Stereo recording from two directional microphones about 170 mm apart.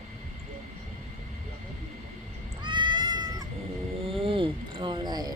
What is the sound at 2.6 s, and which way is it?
Cat, 25° right (ahead or behind).